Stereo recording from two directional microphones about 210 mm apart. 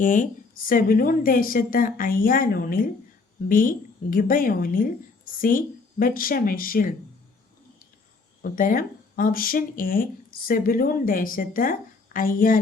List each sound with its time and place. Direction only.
0.0 s a woman's voice: 40° left (ahead or behind)
8.4 s speech: 45° left (ahead or behind)